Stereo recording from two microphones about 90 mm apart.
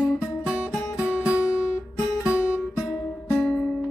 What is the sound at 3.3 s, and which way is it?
Music, 10° left (ahead or behind).